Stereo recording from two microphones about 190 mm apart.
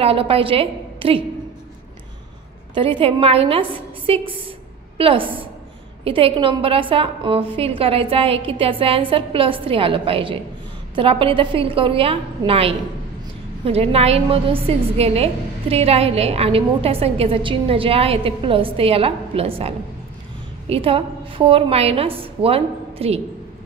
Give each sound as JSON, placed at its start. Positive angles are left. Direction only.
{"t": 0.0, "sound": "a woman's voice", "side_deg": -30}
{"t": 2.7, "sound": "a woman's voice", "side_deg": -25}